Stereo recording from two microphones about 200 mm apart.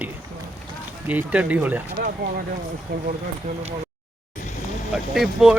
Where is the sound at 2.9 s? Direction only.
50° right (ahead or behind).